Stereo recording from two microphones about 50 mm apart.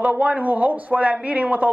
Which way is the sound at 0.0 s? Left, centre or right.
Right.